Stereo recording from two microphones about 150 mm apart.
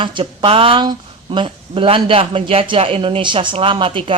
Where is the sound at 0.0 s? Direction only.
35° right (ahead or behind).